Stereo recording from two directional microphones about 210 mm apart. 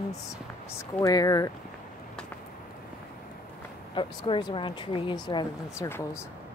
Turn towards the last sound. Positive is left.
turn(degrees=10)  # may be behind; listen again after turning